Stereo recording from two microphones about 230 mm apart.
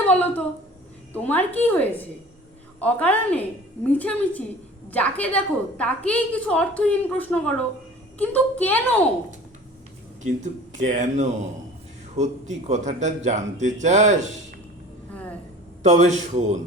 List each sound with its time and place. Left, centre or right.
0.0 s a woman's voice: centre
10.2 s speech: right
15.1 s a sound: centre
15.8 s speech: right